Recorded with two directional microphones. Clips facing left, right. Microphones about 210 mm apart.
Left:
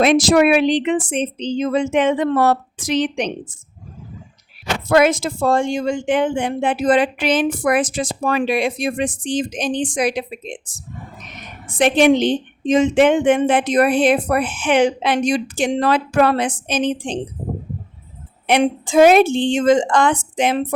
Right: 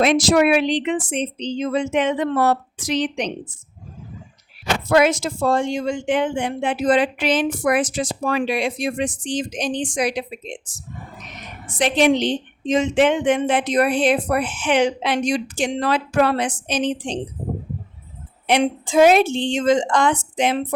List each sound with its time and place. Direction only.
0.0 s a woman's voice: 50° left (ahead or behind)
4.9 s a woman's voice: 50° left (ahead or behind)
11.8 s a woman's voice: 55° left (ahead or behind)
18.4 s a woman's voice: 55° left (ahead or behind)